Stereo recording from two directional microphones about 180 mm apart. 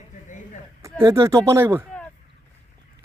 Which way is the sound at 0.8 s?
15° right (ahead or behind).